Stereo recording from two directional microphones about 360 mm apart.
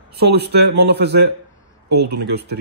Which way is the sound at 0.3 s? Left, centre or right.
Right.